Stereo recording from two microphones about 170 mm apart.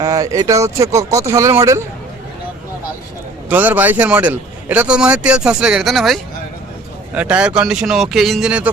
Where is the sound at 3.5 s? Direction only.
10° right (ahead or behind).